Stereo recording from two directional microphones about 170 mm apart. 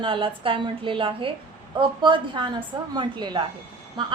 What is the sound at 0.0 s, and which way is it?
A woman's voice, 30° right (ahead or behind).